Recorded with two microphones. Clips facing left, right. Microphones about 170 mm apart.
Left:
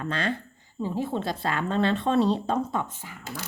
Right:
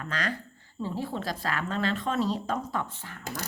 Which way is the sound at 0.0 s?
25° left (ahead or behind).